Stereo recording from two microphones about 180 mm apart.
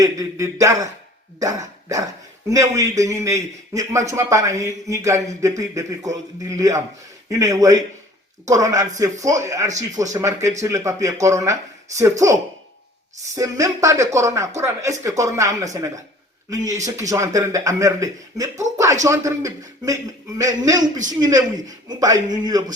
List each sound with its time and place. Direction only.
0.0 s a man's voice: 20° right (ahead or behind)